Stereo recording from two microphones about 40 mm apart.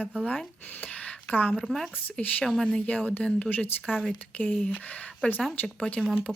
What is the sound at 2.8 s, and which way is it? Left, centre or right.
Speech, left.